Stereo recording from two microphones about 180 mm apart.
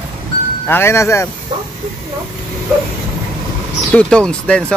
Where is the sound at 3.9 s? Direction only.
5° left (ahead or behind).